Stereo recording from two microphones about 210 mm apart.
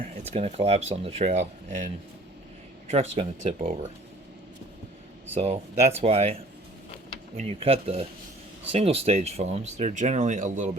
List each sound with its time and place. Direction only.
0.3 s speech: 30° right (ahead or behind)
2.9 s speech: 35° right (ahead or behind)
5.3 s speech: 30° right (ahead or behind)
7.3 s speech: 30° right (ahead or behind)